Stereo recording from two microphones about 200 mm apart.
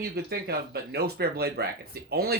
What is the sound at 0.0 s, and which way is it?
Speech, 50° right (ahead or behind).